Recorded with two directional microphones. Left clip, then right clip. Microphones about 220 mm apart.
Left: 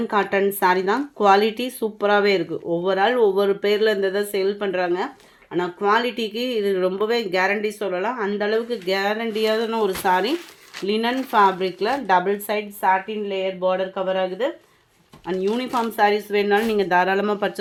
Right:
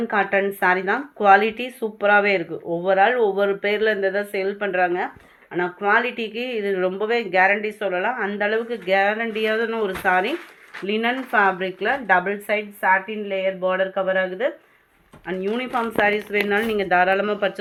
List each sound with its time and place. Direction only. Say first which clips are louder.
0.1 s speech: even; 65° left (ahead or behind)